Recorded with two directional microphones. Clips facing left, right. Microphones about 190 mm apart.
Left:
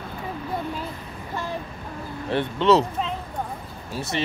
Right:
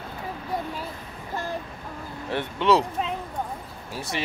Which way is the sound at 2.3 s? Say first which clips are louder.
Left 3 dB; 10° right (ahead or behind).